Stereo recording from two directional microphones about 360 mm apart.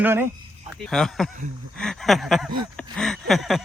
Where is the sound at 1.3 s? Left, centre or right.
Right.